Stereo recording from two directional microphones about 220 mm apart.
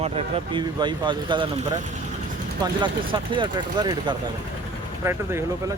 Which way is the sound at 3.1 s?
20° right (ahead or behind).